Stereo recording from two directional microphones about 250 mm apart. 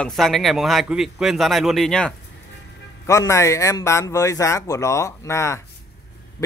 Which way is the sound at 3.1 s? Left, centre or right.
Centre.